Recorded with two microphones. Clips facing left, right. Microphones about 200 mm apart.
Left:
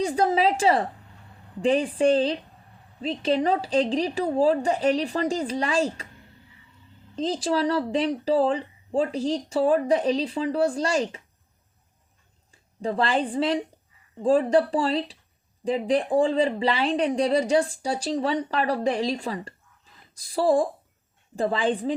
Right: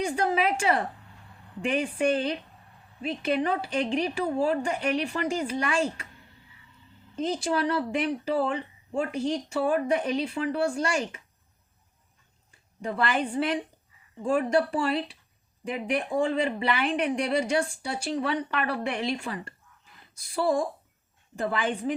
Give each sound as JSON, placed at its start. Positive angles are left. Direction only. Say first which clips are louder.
{"t": 0.0, "sound": "speech", "louder": "left 4 dB", "side_deg": 35}
{"t": 7.2, "sound": "speech", "louder": "left 3 dB", "side_deg": 35}
{"t": 12.8, "sound": "speech", "louder": "left 3 dB", "side_deg": 30}